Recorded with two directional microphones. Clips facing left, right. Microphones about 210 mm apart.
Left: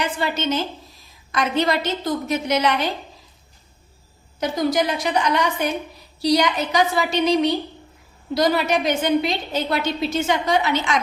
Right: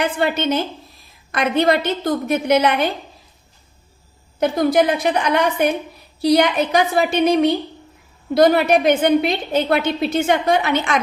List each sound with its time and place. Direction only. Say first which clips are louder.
0.0 s a woman's voice: right 4 dB; 55° right (ahead or behind)
4.4 s a woman's voice: right 5 dB; 55° right (ahead or behind)